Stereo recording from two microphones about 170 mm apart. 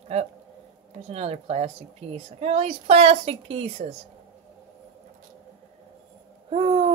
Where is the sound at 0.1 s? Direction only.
40° right (ahead or behind).